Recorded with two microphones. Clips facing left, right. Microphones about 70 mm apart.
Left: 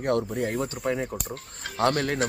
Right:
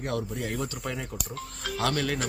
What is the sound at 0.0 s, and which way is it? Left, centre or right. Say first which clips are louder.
Speech: left 6 dB; left.